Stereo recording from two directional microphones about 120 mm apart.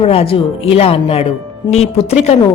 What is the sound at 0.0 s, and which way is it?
A woman's voice, 50° left (ahead or behind).